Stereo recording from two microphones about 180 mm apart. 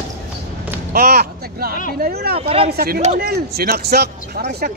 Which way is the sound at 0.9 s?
60° right (ahead or behind).